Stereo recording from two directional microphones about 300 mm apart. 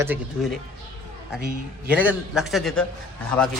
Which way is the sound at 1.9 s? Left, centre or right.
Centre.